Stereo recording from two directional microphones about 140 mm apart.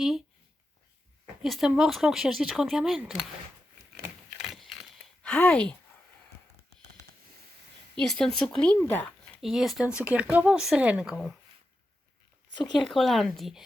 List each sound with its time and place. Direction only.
1.4 s speech: centre (ahead or behind)
4.4 s a sound: centre (ahead or behind)
7.9 s speech: 5° left (ahead or behind)
9.4 s speech: centre (ahead or behind)
12.5 s speech: 30° left (ahead or behind)
12.8 s speech: centre (ahead or behind)